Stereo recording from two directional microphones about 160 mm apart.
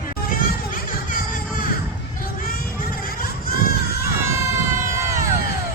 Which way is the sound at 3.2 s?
65° left (ahead or behind).